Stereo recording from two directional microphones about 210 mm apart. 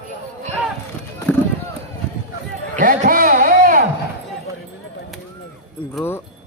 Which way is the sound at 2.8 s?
40° right (ahead or behind).